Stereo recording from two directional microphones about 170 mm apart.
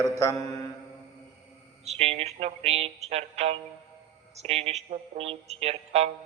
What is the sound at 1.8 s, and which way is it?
A man's voice, 40° right (ahead or behind).